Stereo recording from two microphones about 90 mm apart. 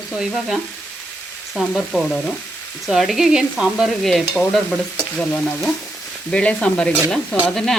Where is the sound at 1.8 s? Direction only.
Centre (ahead or behind).